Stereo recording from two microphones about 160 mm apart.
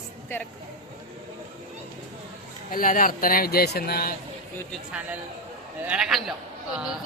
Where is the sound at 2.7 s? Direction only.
60° left (ahead or behind).